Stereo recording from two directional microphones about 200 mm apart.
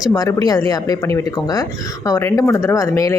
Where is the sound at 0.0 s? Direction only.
20° left (ahead or behind).